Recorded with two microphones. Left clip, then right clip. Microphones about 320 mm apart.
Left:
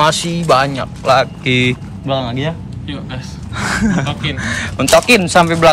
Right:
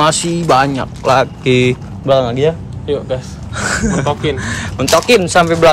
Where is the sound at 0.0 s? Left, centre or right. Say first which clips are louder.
Right 1 dB; centre.